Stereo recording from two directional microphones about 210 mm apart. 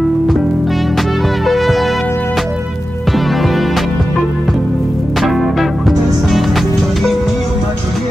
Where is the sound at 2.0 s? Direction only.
10° left (ahead or behind).